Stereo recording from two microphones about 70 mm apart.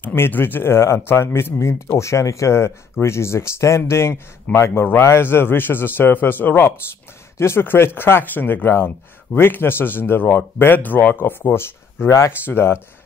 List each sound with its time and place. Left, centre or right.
0.0 s speech: left